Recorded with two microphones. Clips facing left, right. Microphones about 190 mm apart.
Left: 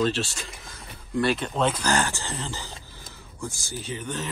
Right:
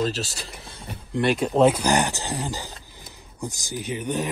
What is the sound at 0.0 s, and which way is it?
Speech, 40° right (ahead or behind).